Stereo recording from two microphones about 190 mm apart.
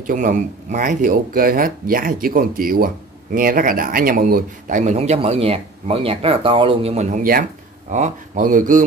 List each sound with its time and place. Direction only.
0.0 s speech: 45° right (ahead or behind)